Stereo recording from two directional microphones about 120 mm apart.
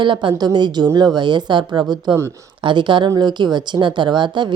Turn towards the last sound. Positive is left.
turn(degrees=-40)  # may be behind; listen again after turning